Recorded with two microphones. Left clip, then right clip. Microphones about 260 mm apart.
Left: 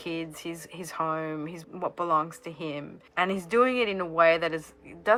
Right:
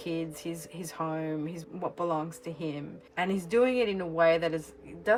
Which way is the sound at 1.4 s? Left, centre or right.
Centre.